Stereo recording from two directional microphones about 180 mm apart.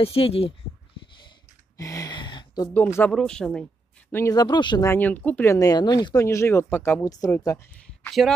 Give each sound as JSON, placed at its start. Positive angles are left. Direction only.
{"t": 0.0, "sound": "speech", "side_deg": 30}
{"t": 1.8, "sound": "a sound", "side_deg": 20}
{"t": 2.7, "sound": "speech", "side_deg": 10}
{"t": 4.1, "sound": "speech", "side_deg": 15}
{"t": 4.8, "sound": "speech", "side_deg": 10}